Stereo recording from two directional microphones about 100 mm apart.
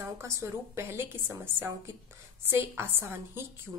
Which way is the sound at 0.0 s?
30° right (ahead or behind).